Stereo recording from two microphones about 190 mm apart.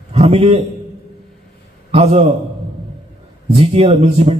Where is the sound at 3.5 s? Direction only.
35° right (ahead or behind).